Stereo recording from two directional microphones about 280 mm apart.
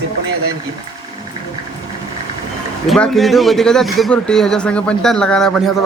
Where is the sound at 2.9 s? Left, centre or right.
Centre.